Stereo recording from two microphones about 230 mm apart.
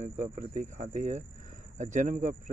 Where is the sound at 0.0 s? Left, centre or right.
Right.